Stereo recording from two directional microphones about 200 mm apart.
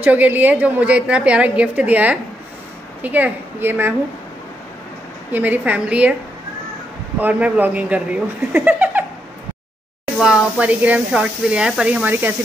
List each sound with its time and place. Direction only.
0.0 s a woman's voice: 10° right (ahead or behind)
5.3 s a woman's voice: 10° right (ahead or behind)
7.2 s a woman's voice: 10° right (ahead or behind)
10.1 s speech: 5° right (ahead or behind)